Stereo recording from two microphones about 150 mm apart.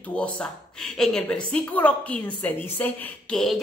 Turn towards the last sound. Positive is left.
turn(degrees=5)  # may be behind; listen again after turning